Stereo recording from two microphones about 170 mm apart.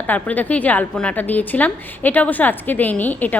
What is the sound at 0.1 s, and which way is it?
A woman's voice, 10° left (ahead or behind).